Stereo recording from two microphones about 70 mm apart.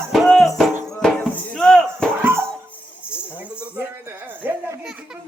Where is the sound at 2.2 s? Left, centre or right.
Right.